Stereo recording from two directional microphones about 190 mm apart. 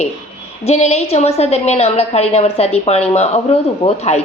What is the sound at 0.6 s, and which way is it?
A woman's voice, 35° left (ahead or behind).